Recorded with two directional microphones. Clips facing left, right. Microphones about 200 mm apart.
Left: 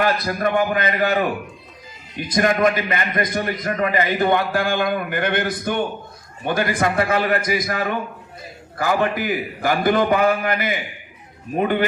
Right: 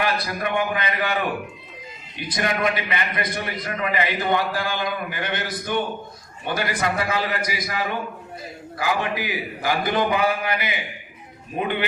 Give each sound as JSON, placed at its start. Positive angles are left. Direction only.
{"t": 0.0, "sound": "a man's voice", "side_deg": 45}